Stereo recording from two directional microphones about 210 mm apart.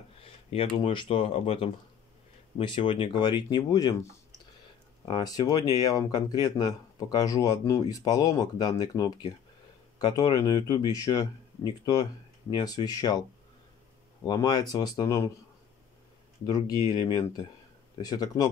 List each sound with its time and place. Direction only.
0.2 s speech: 25° left (ahead or behind)
5.0 s speech: 20° left (ahead or behind)
14.2 s speech: 20° left (ahead or behind)
16.4 s speech: 20° left (ahead or behind)